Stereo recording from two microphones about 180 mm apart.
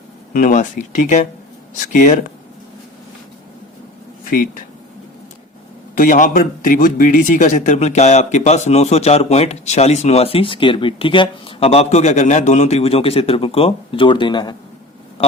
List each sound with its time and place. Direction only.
0.3 s speech: 45° left (ahead or behind)
5.9 s a man's voice: 45° left (ahead or behind); by 14.5 s 25° left (ahead or behind)
15.2 s a sound: 30° left (ahead or behind)